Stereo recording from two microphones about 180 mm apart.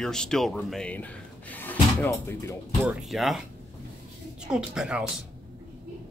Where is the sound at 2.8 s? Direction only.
Centre (ahead or behind).